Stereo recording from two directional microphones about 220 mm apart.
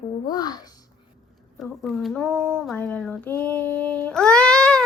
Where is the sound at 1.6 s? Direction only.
Centre (ahead or behind).